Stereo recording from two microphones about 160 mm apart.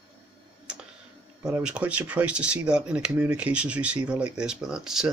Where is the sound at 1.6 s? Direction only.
10° right (ahead or behind).